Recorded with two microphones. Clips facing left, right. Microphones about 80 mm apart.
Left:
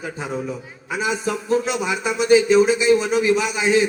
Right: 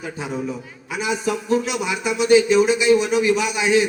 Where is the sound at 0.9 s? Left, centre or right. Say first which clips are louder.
Even; left.